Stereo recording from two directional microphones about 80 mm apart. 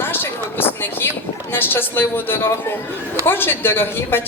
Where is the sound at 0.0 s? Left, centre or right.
Left.